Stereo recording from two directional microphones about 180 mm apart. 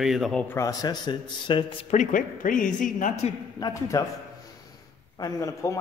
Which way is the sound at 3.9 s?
20° left (ahead or behind).